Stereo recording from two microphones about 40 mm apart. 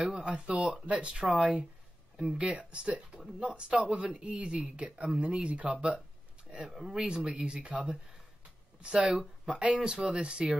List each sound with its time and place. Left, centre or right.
0.0 s speech: right
6.7 s speech: centre
7.2 s speech: right
8.8 s speech: right